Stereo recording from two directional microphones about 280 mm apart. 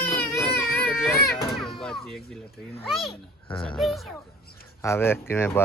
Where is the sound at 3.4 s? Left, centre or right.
Centre.